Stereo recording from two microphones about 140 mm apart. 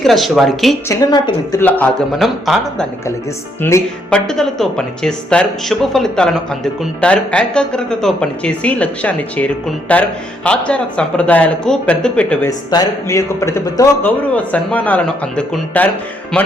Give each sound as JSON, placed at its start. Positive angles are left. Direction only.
{"t": 0.0, "sound": "speech", "side_deg": 0}
{"t": 0.9, "sound": "a woman's voice", "side_deg": 25}
{"t": 1.6, "sound": "speech", "side_deg": 10}
{"t": 2.1, "sound": "speech", "side_deg": 0}
{"t": 3.6, "sound": "a woman's voice", "side_deg": 20}
{"t": 4.1, "sound": "speech", "side_deg": 5}
{"t": 12.5, "sound": "speech", "side_deg": 25}